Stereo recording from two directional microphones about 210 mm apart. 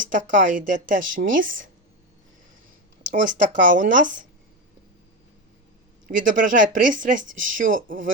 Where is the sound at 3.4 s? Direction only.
40° right (ahead or behind).